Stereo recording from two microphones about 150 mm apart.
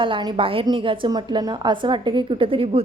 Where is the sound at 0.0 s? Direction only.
30° right (ahead or behind).